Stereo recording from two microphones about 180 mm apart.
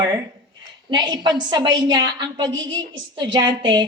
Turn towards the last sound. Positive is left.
turn(degrees=-25)  # may be behind; listen again after turning